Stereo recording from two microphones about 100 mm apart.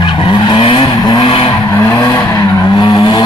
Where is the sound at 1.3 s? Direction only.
65° left (ahead or behind).